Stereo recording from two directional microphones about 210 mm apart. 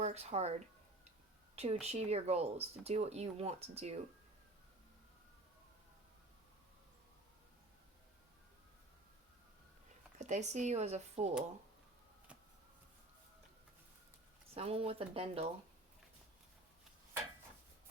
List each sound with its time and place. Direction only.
0.0 s speech: 30° right (ahead or behind)
1.5 s speech: 30° right (ahead or behind)
10.2 s speech: 35° right (ahead or behind)
14.5 s speech: 30° right (ahead or behind)